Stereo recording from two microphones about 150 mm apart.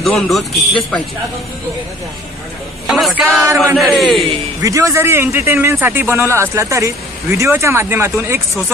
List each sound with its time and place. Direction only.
0.0 s speech: centre (ahead or behind)
3.2 s speech: centre (ahead or behind)
4.6 s a man's voice: 20° right (ahead or behind)